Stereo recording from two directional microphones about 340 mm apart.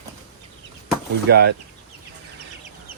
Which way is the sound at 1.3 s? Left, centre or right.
Right.